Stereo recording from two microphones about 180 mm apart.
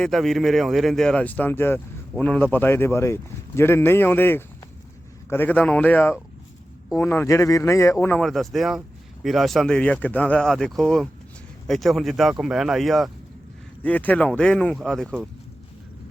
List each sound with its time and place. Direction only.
0.0 s speech: centre (ahead or behind)